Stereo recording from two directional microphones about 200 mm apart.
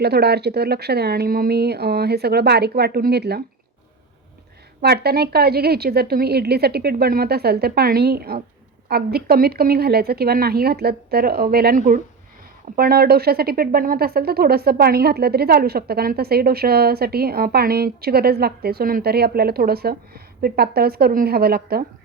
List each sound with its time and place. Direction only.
0.0 s a woman's voice: 55° right (ahead or behind)
4.8 s a woman's voice: 55° right (ahead or behind)